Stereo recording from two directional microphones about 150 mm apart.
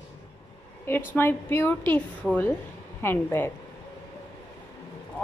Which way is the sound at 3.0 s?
15° left (ahead or behind).